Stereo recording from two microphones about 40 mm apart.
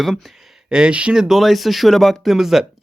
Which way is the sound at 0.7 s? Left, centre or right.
Right.